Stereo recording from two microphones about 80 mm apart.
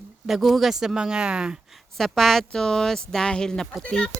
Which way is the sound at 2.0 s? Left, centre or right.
Centre.